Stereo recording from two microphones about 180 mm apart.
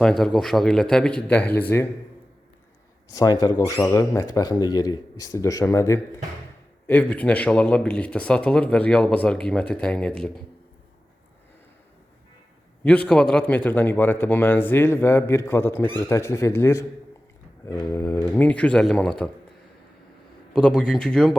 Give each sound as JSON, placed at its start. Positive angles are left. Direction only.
{"t": 0.0, "sound": "speech", "side_deg": 5}
{"t": 3.2, "sound": "speech", "side_deg": 20}
{"t": 12.8, "sound": "speech", "side_deg": 5}
{"t": 20.5, "sound": "speech", "side_deg": 5}